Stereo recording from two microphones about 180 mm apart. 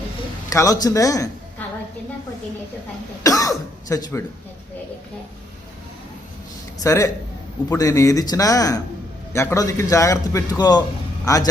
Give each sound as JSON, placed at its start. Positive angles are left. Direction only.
{"t": 0.5, "sound": "speech", "side_deg": 20}
{"t": 3.2, "sound": "throat clearing", "side_deg": 20}
{"t": 6.8, "sound": "a man's voice", "side_deg": 15}